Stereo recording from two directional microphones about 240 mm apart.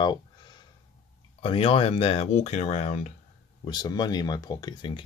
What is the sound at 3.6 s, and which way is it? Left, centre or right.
Speech, centre.